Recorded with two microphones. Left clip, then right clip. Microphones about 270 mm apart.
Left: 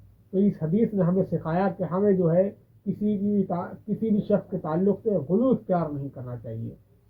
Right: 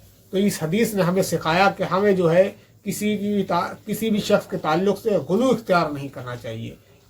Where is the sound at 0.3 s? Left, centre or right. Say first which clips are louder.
Right 3 dB; centre.